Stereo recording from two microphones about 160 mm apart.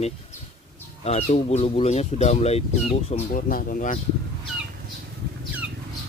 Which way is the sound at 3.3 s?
60° left (ahead or behind).